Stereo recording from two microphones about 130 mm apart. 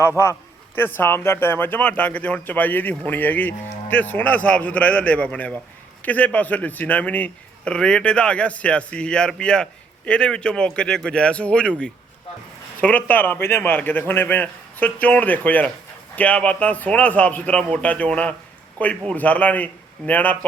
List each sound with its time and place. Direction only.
0.2 s a man's voice: 20° left (ahead or behind)
12.8 s speech: 10° left (ahead or behind)